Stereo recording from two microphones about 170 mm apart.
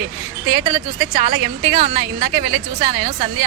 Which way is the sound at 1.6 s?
65° right (ahead or behind).